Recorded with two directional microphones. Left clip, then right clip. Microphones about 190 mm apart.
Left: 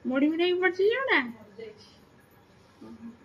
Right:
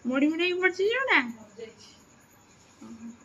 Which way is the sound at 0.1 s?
5° right (ahead or behind).